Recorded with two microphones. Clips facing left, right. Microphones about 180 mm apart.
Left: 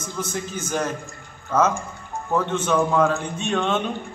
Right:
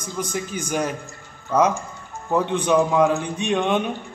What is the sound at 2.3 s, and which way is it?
A man's voice, 15° right (ahead or behind).